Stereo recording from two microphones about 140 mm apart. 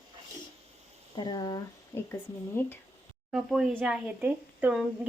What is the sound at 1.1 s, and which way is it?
Speech, 30° left (ahead or behind).